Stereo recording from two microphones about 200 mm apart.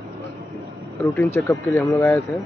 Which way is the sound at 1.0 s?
15° left (ahead or behind).